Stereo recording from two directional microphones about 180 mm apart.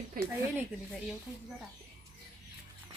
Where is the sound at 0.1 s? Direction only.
50° right (ahead or behind).